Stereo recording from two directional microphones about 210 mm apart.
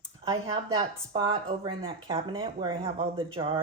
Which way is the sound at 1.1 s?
25° right (ahead or behind).